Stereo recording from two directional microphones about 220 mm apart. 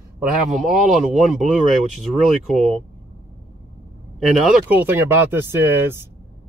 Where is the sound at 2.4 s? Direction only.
Centre (ahead or behind).